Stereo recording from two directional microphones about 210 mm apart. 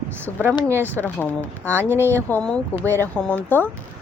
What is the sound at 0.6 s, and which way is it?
Speech, 10° right (ahead or behind).